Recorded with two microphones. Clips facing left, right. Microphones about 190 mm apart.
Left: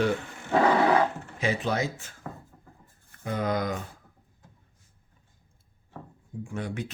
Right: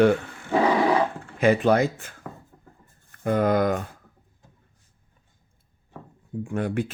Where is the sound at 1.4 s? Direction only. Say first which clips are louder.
Right 9 dB; 55° right (ahead or behind).